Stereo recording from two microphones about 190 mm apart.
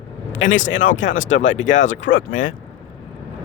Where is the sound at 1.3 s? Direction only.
80° left.